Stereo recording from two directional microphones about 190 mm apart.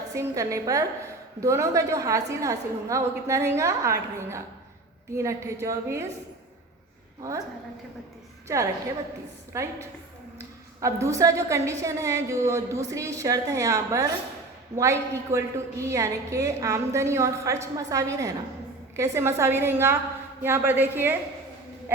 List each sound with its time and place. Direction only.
0.1 s a woman's voice: 15° right (ahead or behind)
7.2 s a woman's voice: 20° right (ahead or behind)
8.4 s a woman's voice: 15° right (ahead or behind)